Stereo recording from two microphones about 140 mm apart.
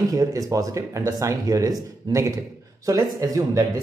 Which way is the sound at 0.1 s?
25° right (ahead or behind).